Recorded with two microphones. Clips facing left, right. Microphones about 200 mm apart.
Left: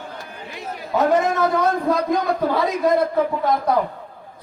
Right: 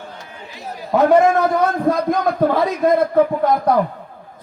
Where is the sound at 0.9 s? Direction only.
55° right (ahead or behind).